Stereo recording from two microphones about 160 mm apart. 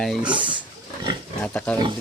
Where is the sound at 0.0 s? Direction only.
Centre (ahead or behind).